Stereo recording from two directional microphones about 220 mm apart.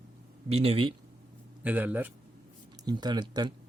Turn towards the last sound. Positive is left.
turn(degrees=-20)  # may be behind; listen again after turning